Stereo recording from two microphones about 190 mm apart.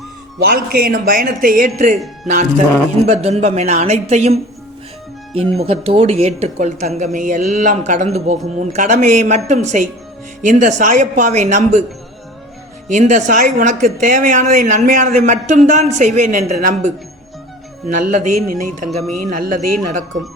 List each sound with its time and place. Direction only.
0.3 s speech: 50° right (ahead or behind)
12.9 s speech: 40° right (ahead or behind)